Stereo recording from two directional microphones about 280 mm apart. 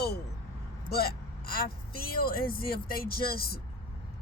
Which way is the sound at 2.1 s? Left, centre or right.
Left.